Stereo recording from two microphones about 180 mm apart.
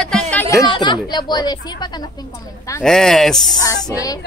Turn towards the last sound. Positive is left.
turn(degrees=20)  # may be behind; listen again after turning